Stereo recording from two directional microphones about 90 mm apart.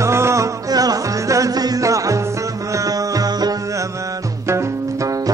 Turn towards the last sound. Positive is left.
turn(degrees=-35)  # may be behind; listen again after turning